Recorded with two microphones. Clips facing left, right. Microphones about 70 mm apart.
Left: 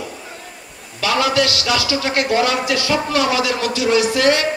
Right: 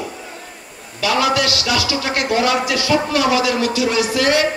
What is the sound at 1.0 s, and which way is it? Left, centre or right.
A man's voice, left.